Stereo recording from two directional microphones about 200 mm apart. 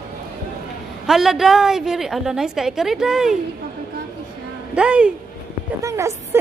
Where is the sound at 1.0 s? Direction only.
Centre (ahead or behind).